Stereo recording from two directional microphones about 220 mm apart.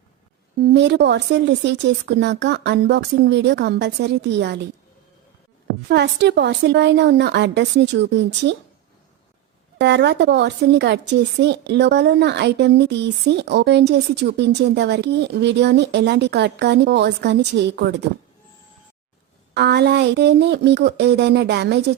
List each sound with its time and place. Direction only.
0.6 s speech: 50° right (ahead or behind)
5.9 s speech: 50° right (ahead or behind)
9.7 s speech: 50° right (ahead or behind)
19.5 s speech: 50° right (ahead or behind)